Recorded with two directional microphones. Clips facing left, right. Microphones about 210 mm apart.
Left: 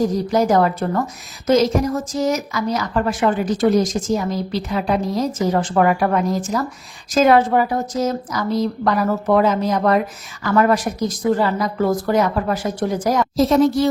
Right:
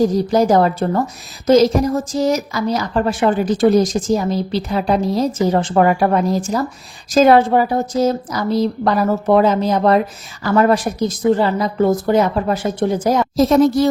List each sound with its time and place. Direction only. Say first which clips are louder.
0.0 s a woman's voice: right 3 dB; 30° right (ahead or behind)
13.3 s a woman's voice: right 2 dB; 45° right (ahead or behind)